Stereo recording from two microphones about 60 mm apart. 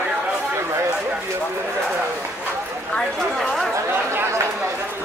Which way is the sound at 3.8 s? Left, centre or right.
Right.